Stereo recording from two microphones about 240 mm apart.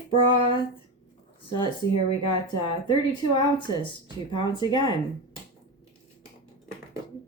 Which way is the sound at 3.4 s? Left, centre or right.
Centre.